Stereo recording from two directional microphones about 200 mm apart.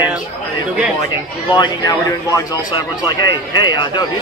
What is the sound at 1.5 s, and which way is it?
A man's voice, 20° left (ahead or behind).